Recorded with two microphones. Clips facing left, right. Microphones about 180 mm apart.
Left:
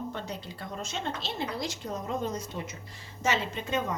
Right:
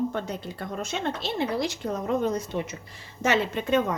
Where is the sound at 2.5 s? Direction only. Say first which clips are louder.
Right 8 dB; 90° right.